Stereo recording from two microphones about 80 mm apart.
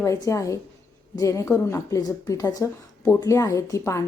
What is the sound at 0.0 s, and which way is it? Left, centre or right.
Speech, left.